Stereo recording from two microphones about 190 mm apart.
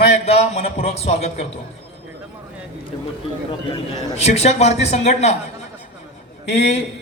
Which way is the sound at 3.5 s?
30° left (ahead or behind).